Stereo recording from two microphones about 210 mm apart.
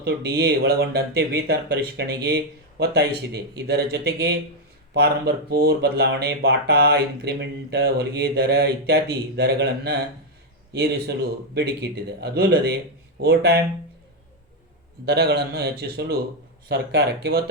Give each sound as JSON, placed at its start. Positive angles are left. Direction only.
{"t": 0.0, "sound": "speech", "side_deg": -50}
{"t": 15.0, "sound": "speech", "side_deg": -50}